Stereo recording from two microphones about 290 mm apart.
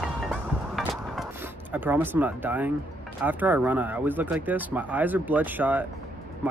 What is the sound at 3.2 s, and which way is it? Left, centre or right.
Speech, centre.